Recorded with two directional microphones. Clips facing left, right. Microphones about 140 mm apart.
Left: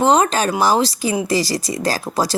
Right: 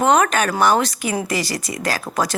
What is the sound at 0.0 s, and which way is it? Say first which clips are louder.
Speech: left 1 dB; 30° left (ahead or behind).